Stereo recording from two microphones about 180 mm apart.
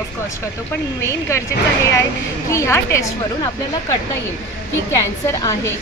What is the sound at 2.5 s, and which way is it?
A woman's voice, 15° left (ahead or behind).